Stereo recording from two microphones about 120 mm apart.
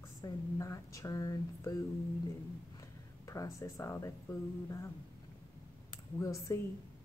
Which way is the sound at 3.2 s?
25° left (ahead or behind).